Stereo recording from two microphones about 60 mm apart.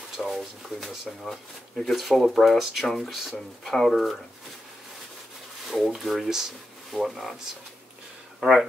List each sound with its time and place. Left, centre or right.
0.2 s speech: centre
5.7 s speech: centre
8.4 s speech: centre